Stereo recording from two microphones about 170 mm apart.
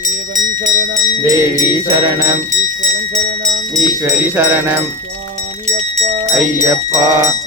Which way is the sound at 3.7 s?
20° right (ahead or behind).